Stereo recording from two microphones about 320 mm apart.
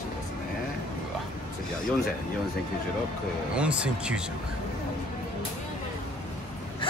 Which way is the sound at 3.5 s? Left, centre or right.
Centre.